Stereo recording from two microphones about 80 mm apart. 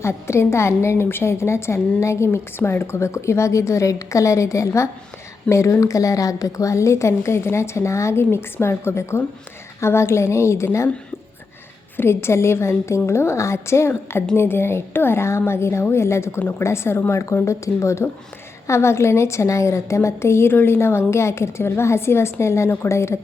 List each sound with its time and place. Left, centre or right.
0.0 s a woman's voice: left
11.9 s a woman's voice: left
16.4 s a woman's voice: left
16.6 s a woman's voice: left